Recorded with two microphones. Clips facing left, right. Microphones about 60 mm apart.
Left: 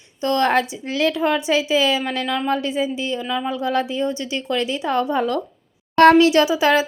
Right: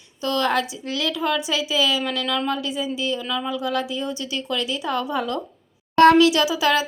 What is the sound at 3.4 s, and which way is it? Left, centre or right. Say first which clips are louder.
A woman's voice: left 4 dB; left.